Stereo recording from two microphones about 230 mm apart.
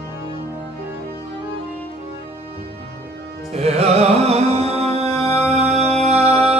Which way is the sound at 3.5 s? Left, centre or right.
Right.